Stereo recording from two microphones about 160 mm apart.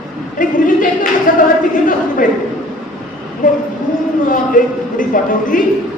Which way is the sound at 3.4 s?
55° left (ahead or behind).